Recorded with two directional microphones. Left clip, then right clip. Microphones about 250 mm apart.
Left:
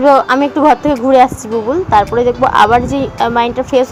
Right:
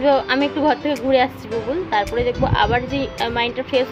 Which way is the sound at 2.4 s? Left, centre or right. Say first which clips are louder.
Left 11 dB; centre.